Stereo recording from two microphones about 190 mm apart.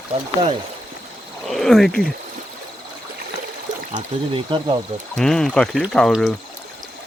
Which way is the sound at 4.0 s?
25° right (ahead or behind).